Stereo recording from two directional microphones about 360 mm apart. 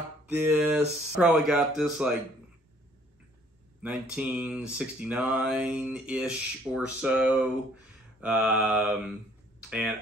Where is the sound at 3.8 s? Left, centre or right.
Centre.